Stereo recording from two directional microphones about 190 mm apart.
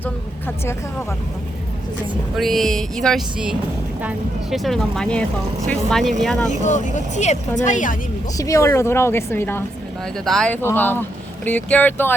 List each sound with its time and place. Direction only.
2.3 s speech: centre (ahead or behind)
6.6 s speech: 40° left (ahead or behind)
8.4 s a woman's voice: 15° left (ahead or behind)